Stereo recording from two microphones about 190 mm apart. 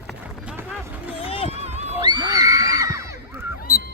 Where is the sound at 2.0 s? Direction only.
25° right (ahead or behind).